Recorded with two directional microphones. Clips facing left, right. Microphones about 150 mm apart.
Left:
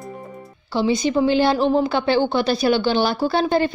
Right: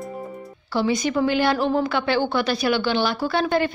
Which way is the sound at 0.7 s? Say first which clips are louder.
Left 2 dB; 25° left (ahead or behind).